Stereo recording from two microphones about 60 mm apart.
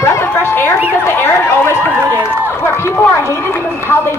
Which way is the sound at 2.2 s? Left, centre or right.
Left.